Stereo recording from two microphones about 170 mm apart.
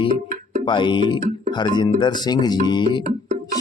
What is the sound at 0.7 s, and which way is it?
Speech, 30° left (ahead or behind).